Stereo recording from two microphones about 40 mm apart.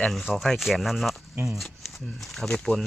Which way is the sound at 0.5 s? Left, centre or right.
Centre.